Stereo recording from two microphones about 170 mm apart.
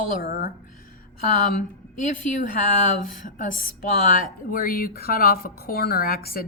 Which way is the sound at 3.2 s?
50° left (ahead or behind).